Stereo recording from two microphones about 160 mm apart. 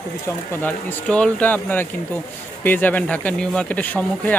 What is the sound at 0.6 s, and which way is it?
Speech, 10° left (ahead or behind).